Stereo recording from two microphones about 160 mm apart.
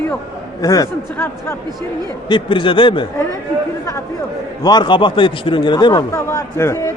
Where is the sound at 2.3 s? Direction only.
30° left (ahead or behind).